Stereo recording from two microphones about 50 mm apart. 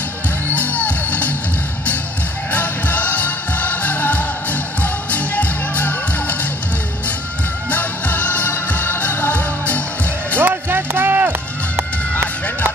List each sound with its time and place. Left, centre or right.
0.6 s music: left
2.5 s music: left
7.7 s music: left
10.4 s music: right
11.7 s fowl: right